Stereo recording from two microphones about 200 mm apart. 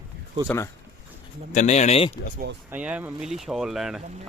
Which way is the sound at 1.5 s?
35° left (ahead or behind).